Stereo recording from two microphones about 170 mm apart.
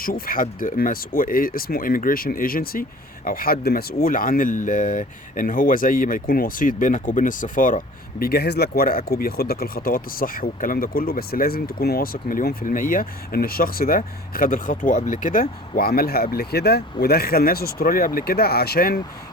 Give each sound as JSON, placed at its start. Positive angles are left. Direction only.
{"t": 0.0, "sound": "speech", "side_deg": 55}
{"t": 4.0, "sound": "speech", "side_deg": 55}
{"t": 8.2, "sound": "speech", "side_deg": 65}